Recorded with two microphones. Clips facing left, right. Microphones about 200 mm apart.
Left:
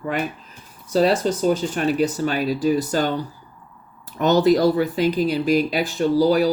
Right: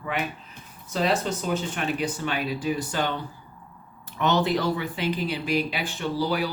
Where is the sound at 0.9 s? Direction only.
40° left (ahead or behind).